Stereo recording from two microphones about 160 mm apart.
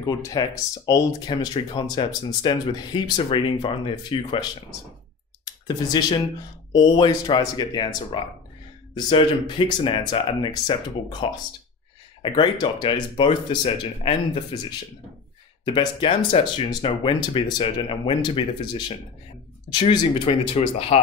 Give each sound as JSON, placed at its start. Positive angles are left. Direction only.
{"t": 0.0, "sound": "speech", "side_deg": 25}
{"t": 5.4, "sound": "clicking", "side_deg": 25}
{"t": 6.7, "sound": "speech", "side_deg": 25}
{"t": 9.7, "sound": "speech", "side_deg": 35}
{"t": 15.6, "sound": "speech", "side_deg": 30}